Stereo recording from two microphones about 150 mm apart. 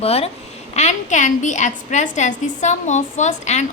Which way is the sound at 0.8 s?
50° left (ahead or behind).